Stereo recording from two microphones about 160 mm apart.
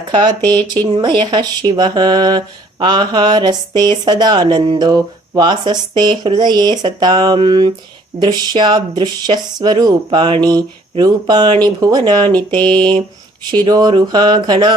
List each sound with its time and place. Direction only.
0.1 s speech: 25° right (ahead or behind)